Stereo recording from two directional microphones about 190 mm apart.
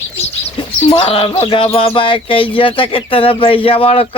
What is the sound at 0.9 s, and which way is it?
Speech, 30° left (ahead or behind).